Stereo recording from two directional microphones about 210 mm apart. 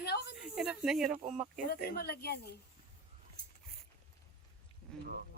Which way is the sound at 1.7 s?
45° left (ahead or behind).